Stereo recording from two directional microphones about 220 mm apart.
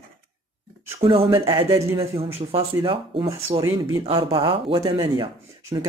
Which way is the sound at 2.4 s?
25° right (ahead or behind).